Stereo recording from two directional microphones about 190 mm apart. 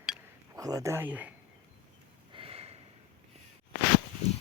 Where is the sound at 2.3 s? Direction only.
30° right (ahead or behind).